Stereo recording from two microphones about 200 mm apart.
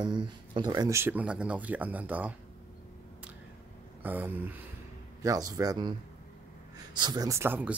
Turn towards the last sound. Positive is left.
turn(degrees=-10)  # may be behind; listen again after turning